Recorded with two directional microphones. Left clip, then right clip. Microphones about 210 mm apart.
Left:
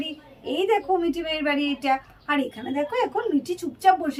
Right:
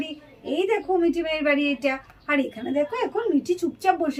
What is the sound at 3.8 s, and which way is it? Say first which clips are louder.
Speech: left 4 dB; 25° right (ahead or behind).